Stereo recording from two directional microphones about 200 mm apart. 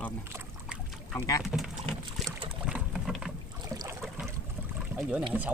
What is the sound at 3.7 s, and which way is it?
Boat, 15° right (ahead or behind).